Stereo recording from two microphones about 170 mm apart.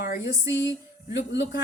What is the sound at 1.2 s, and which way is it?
Speech, 90° left.